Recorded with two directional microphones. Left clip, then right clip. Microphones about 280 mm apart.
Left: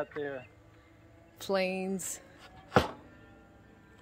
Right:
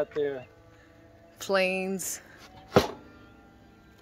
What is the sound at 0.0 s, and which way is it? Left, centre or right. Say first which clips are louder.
Speech: right 7 dB; right.